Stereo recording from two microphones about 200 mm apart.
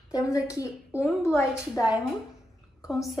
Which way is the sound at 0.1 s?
15° left (ahead or behind).